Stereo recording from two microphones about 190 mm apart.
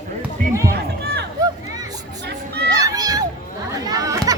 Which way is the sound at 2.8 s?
20° right (ahead or behind).